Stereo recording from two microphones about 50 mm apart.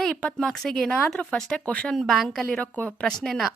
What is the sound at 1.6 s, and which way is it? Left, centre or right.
Speech, left.